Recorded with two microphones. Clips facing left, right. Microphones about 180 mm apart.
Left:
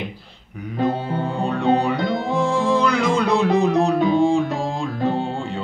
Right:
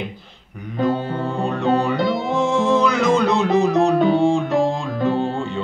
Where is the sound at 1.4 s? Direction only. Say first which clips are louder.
Even; centre (ahead or behind).